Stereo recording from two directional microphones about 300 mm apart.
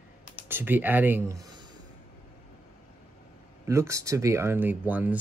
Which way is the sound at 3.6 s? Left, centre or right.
Centre.